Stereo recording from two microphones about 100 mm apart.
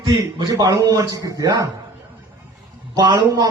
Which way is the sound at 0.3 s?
45° right (ahead or behind).